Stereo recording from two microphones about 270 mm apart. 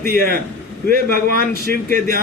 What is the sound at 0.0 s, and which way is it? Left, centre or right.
A man's voice, right.